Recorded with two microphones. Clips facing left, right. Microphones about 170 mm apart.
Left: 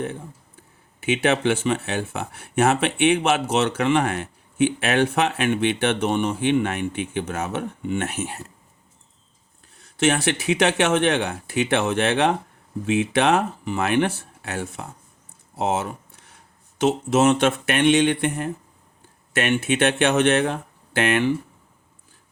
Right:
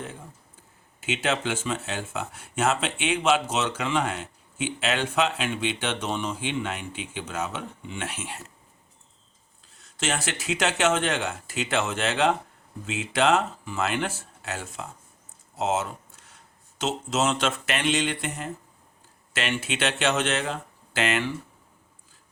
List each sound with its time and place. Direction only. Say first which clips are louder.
1.0 s speech: left 7 dB; 60° left (ahead or behind)
9.7 s speech: left 9 dB; 60° left (ahead or behind)
15.5 s a sound: left 3 dB; 60° left (ahead or behind)
16.8 s speech: left 8 dB; 60° left (ahead or behind)